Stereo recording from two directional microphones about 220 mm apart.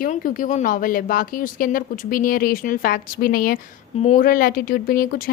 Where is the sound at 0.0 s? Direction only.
40° left (ahead or behind).